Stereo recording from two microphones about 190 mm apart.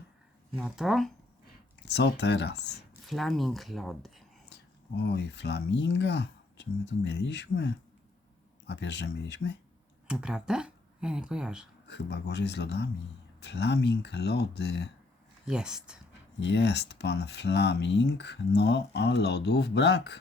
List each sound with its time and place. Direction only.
0.5 s speech: 5° right (ahead or behind)
1.8 s speech: 60° left (ahead or behind)
3.1 s speech: centre (ahead or behind)
5.0 s speech: 65° left (ahead or behind)
10.1 s speech: 5° right (ahead or behind)
11.9 s speech: 65° left (ahead or behind)
15.4 s speech: 5° right (ahead or behind)
16.4 s speech: 65° left (ahead or behind)